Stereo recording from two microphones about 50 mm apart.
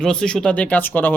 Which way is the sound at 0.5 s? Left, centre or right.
Left.